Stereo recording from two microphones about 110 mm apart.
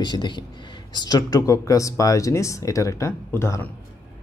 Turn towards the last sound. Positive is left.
turn(degrees=25)  # may be behind; listen again after turning